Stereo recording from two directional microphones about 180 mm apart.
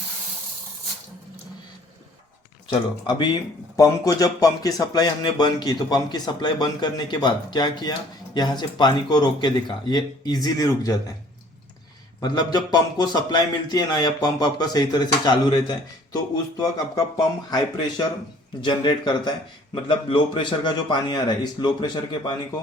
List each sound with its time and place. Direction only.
2.6 s speech: 25° left (ahead or behind)
12.2 s speech: 25° left (ahead or behind)